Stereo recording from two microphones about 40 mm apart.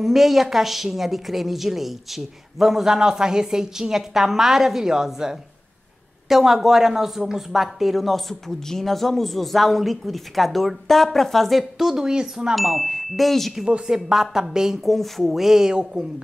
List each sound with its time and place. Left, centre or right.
0.0 s a woman's voice: centre
11.8 s a woman's voice: centre
12.5 s speech: centre
13.8 s a woman's voice: centre
14.9 s a woman's voice: centre